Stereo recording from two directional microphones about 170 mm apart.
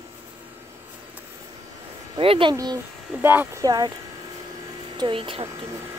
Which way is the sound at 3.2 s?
15° right (ahead or behind).